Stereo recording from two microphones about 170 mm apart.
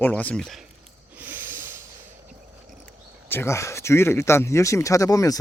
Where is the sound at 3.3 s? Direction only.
15° left (ahead or behind).